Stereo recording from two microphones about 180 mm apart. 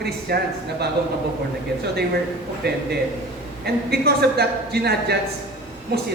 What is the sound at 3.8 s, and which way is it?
A woman's voice, 65° right (ahead or behind).